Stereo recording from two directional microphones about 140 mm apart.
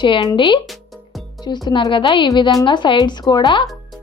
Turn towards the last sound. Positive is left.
turn(degrees=35)  # may be behind; listen again after turning